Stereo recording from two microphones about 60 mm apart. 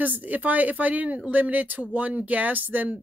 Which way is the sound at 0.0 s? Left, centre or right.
Right.